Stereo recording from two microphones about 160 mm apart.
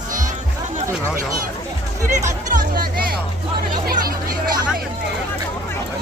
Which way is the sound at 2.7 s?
65° right (ahead or behind).